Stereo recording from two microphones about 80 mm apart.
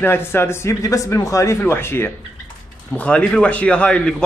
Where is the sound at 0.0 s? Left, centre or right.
Left.